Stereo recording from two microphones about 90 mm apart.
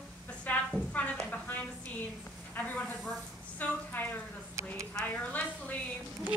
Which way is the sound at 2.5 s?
15° left (ahead or behind).